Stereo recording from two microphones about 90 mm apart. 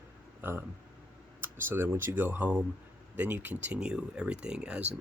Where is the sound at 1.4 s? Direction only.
25° right (ahead or behind).